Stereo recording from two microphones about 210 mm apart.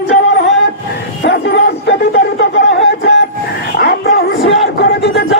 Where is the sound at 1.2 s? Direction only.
55° left (ahead or behind).